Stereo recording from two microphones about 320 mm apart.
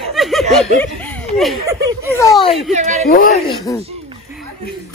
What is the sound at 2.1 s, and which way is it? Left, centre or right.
Speech, centre.